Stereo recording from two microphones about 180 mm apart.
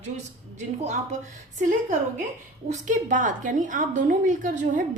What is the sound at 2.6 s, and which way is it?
A woman's voice, 45° right (ahead or behind).